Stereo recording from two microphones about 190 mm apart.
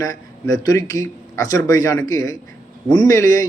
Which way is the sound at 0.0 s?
20° left (ahead or behind).